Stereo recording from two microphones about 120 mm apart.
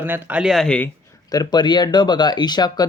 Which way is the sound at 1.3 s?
35° left (ahead or behind).